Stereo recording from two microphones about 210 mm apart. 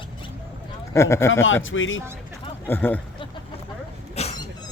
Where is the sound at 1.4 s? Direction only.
65° left (ahead or behind).